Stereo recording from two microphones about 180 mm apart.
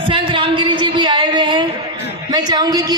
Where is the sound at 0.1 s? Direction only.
30° right (ahead or behind).